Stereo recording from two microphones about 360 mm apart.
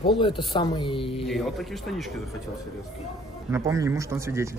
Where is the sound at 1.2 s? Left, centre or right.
Centre.